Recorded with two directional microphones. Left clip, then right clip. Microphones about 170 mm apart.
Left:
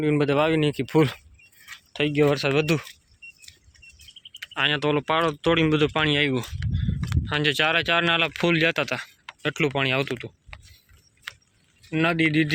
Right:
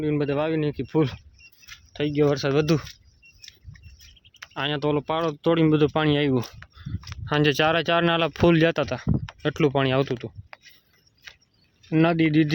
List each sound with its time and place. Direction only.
0.0 s speech: 5° left (ahead or behind)
1.9 s speech: 10° right (ahead or behind); by 2.9 s 30° right (ahead or behind)
4.5 s speech: 20° right (ahead or behind)
11.9 s speech: 30° right (ahead or behind)